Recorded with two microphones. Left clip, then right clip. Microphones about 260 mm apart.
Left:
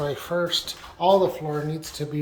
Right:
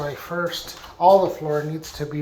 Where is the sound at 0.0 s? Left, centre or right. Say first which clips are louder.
Left 1 dB; centre.